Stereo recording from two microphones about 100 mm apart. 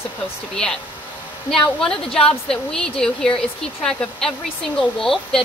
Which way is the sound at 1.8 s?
5° left (ahead or behind).